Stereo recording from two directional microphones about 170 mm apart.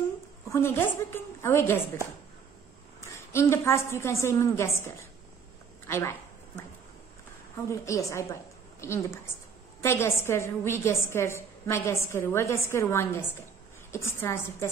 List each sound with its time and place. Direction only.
0.5 s a woman's voice: 15° left (ahead or behind)
3.3 s a woman's voice: 15° left (ahead or behind)
5.9 s a sound: 15° left (ahead or behind)
7.8 s a woman's voice: 20° left (ahead or behind)